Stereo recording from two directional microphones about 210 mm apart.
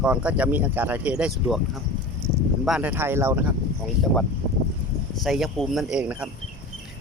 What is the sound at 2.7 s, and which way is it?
Speech, 5° right (ahead or behind).